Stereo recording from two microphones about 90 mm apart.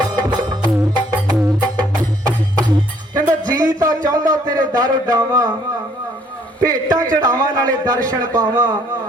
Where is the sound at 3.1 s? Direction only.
45° right (ahead or behind).